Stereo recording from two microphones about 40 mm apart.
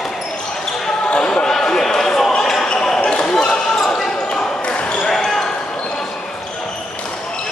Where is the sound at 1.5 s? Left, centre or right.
Centre.